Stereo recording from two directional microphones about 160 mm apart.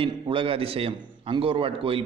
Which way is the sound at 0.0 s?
35° right (ahead or behind).